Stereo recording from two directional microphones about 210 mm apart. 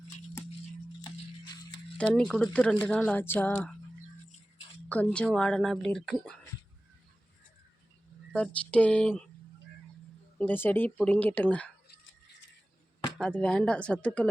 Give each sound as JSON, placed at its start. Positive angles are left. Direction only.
{"t": 1.0, "sound": "music", "side_deg": 20}
{"t": 2.0, "sound": "speech", "side_deg": 5}
{"t": 4.9, "sound": "speech", "side_deg": 5}
{"t": 8.3, "sound": "speech", "side_deg": 5}
{"t": 10.3, "sound": "speech", "side_deg": 10}
{"t": 13.1, "sound": "speech", "side_deg": 5}